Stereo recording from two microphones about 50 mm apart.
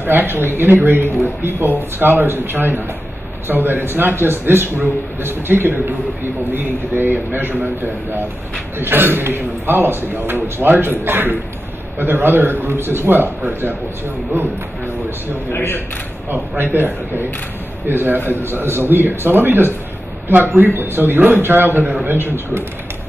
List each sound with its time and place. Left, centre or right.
0.0 s a man's voice: right
15.5 s a man's voice: left
16.7 s a man's voice: right